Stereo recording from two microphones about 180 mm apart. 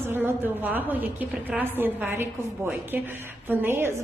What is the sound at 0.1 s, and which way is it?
A woman's voice, 10° right (ahead or behind).